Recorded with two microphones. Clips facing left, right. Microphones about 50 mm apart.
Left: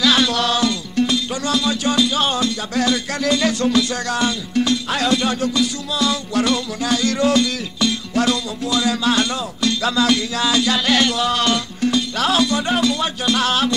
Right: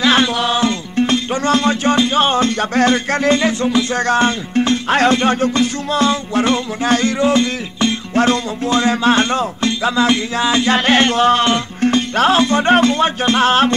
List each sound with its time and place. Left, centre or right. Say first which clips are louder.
0.0 s music: right 3 dB; right
0.7 s music: right 3 dB; right
7.1 s music: right 2 dB; right
9.7 s music: right 1 dB; right